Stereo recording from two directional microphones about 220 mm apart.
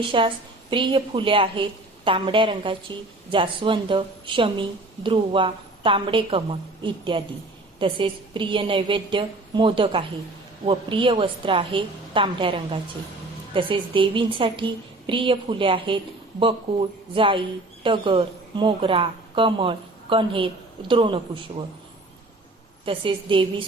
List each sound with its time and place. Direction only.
0.1 s a woman's voice: 20° right (ahead or behind)
17.2 s a woman's voice: 25° right (ahead or behind)
22.9 s a woman's voice: 25° right (ahead or behind)